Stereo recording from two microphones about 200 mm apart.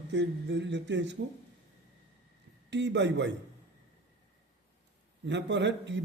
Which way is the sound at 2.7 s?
60° right (ahead or behind).